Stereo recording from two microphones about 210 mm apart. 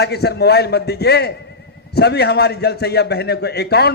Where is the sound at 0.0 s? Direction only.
50° left (ahead or behind).